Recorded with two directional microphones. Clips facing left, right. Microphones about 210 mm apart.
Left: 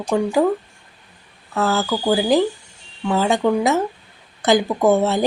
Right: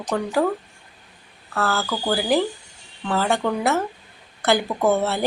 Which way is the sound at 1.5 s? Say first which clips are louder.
Left 4 dB; 20° left (ahead or behind).